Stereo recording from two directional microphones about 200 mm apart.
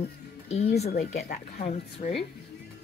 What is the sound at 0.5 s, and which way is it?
Speech, 35° left (ahead or behind).